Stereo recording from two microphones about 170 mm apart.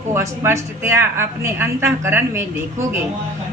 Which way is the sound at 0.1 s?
15° right (ahead or behind).